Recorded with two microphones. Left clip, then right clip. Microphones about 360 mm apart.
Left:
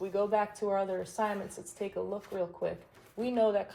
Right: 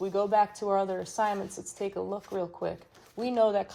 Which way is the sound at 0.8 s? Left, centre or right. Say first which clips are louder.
Right 3 dB; right.